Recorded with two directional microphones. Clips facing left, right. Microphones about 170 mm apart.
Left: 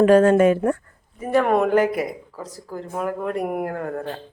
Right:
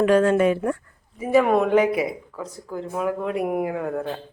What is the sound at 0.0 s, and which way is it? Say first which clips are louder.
Speech: left 4 dB; 45° left (ahead or behind).